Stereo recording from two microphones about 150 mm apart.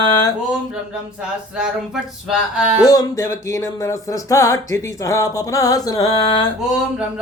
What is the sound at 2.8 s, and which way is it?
Music, 20° left (ahead or behind).